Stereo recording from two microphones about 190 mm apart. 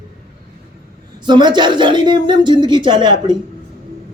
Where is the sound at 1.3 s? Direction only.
25° right (ahead or behind).